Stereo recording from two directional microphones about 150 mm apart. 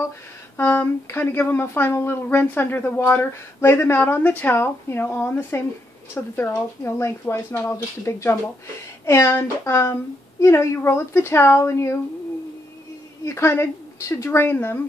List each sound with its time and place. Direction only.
0.6 s speech: 15° left (ahead or behind)
13.2 s speech: 20° left (ahead or behind)